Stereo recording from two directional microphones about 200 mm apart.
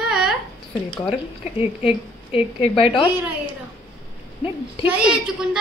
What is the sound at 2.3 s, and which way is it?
Speech, 30° left (ahead or behind).